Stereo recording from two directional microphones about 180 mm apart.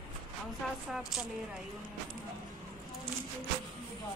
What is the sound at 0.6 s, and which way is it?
Speech, centre (ahead or behind).